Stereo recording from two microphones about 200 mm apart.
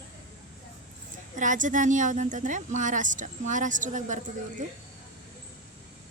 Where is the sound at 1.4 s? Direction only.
40° right (ahead or behind).